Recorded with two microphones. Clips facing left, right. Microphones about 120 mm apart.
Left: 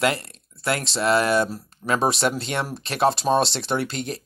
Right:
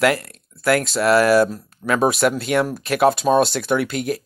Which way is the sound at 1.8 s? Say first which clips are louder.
Right 3 dB; 15° right (ahead or behind).